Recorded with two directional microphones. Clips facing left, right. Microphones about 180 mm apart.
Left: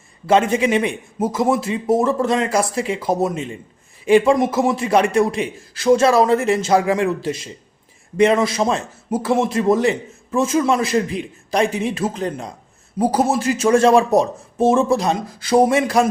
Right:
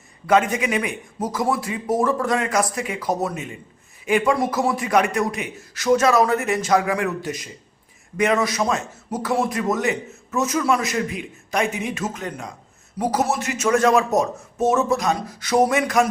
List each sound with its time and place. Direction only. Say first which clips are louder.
0.3 s a man's voice: left 3 dB; 30° left (ahead or behind)